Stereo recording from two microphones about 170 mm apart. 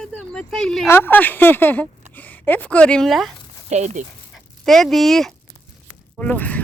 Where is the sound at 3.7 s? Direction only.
45° right (ahead or behind).